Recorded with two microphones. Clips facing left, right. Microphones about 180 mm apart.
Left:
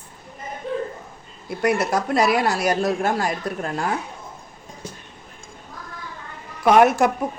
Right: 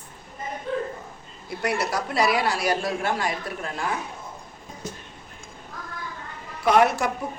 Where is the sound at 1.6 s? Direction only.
50° left (ahead or behind).